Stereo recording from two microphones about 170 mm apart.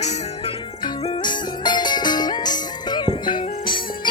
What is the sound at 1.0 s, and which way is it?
Music, 25° left (ahead or behind).